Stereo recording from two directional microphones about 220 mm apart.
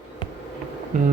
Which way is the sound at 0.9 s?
35° right (ahead or behind).